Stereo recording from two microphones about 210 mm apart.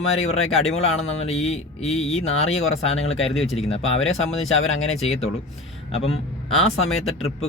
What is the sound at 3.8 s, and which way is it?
Speech, 70° left (ahead or behind).